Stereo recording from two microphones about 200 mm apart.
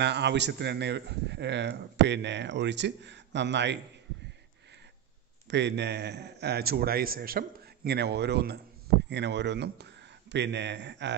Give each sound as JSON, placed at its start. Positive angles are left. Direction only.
{"t": 0.0, "sound": "speech", "side_deg": -60}
{"t": 5.5, "sound": "speech", "side_deg": -60}